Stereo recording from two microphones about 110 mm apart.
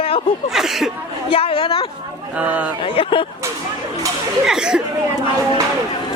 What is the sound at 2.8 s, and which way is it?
Speech, 55° left (ahead or behind).